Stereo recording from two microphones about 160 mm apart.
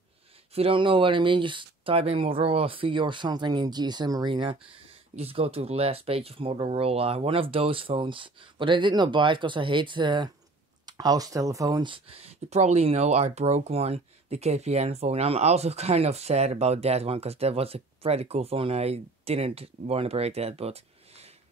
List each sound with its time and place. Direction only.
0.5 s speech: 35° right (ahead or behind)